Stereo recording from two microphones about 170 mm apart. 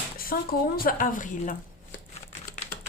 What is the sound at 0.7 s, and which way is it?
Speech, 55° left (ahead or behind).